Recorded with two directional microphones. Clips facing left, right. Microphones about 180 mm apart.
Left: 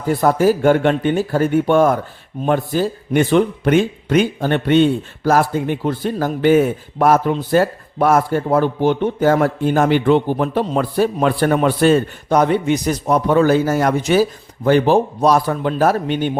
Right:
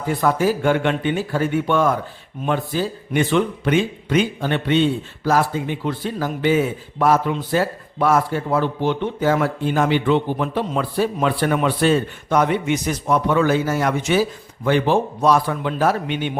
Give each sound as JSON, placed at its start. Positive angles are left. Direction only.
{"t": 0.1, "sound": "speech", "side_deg": 40}